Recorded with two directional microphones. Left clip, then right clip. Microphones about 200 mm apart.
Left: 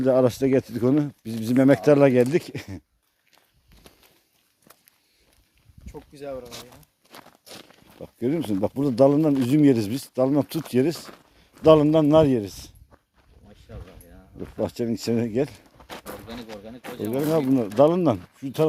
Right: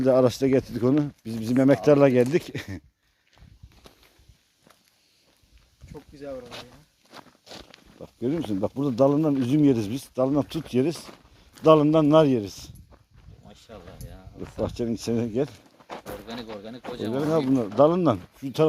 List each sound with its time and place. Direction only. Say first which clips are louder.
0.0 s speech: even; 5° left (ahead or behind)
5.9 s a sound: left 2 dB; 45° left (ahead or behind)
6.5 s speech: even; 35° left (ahead or behind)
7.5 s walk: even; 15° left (ahead or behind)
8.0 s a man's voice: left 2 dB; 20° left (ahead or behind)
13.5 s a sound: right 2 dB; 25° right (ahead or behind)
14.6 s speech: left 2 dB; 15° left (ahead or behind)
15.8 s goat: right 1 dB; 35° left (ahead or behind)
16.6 s speech: right 2 dB; 40° right (ahead or behind)
17.2 s speech: left 1 dB; 25° left (ahead or behind)
17.7 s speech: left 1 dB; 10° left (ahead or behind)